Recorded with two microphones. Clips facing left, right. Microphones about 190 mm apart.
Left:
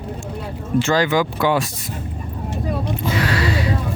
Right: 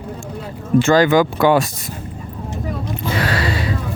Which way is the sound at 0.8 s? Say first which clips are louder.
Right 5 dB; 50° right (ahead or behind).